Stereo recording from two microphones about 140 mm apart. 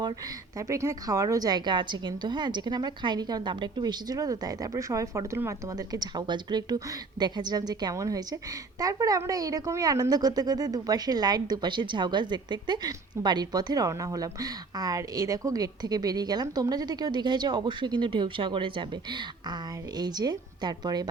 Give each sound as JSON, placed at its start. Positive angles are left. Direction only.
{"t": 0.7, "sound": "a woman's voice", "side_deg": -20}